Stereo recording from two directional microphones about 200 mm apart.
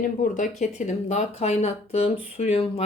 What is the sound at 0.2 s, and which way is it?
Speech, 40° left (ahead or behind).